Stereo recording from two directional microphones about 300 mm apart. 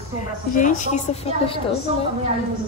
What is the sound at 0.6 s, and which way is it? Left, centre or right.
A woman's voice, left.